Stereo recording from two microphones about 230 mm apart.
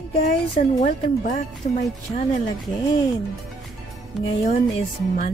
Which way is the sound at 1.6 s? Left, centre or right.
Left.